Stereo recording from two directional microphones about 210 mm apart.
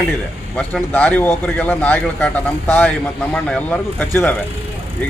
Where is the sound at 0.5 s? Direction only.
5° left (ahead or behind).